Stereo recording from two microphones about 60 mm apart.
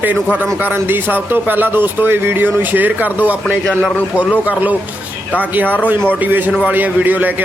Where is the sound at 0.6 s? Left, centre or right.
Right.